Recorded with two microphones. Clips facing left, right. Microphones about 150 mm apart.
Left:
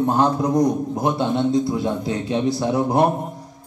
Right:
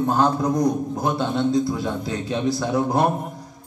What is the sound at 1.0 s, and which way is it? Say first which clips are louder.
A man's voice: left 2 dB; 25° left (ahead or behind).